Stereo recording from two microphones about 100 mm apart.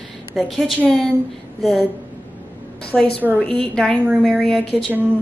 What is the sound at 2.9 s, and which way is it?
A woman's voice, 5° left (ahead or behind).